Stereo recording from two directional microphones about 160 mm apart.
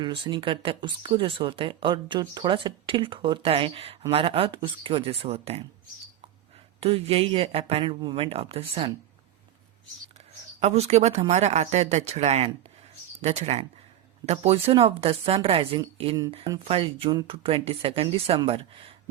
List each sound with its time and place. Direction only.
0.0 s speech: 30° right (ahead or behind)
6.7 s speech: 35° right (ahead or behind)
10.6 s speech: 40° right (ahead or behind)